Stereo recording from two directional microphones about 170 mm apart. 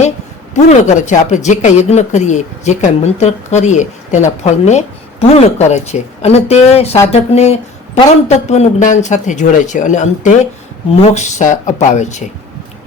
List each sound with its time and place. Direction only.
0.5 s speech: 40° left (ahead or behind)